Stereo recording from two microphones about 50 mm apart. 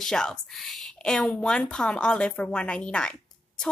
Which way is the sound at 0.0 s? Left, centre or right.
Centre.